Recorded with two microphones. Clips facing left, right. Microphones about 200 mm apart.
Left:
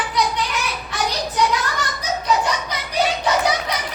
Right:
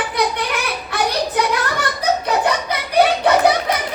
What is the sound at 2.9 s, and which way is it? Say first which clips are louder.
Children playing: right 6 dB; 60° right (ahead or behind).